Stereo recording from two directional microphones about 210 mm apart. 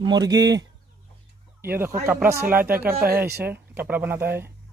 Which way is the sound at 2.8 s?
10° right (ahead or behind).